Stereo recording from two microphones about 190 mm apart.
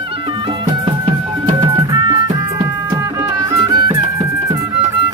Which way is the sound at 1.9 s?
20° right (ahead or behind).